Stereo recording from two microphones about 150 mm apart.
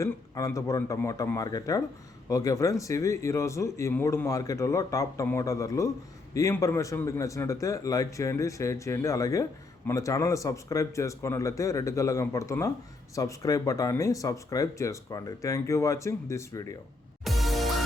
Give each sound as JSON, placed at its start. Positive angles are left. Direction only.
{"t": 0.0, "sound": "a man's voice", "side_deg": 20}
{"t": 17.2, "sound": "music", "side_deg": 0}